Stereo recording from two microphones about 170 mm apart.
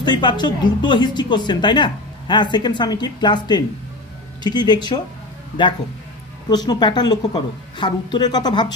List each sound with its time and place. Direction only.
0.0 s speech: 25° left (ahead or behind)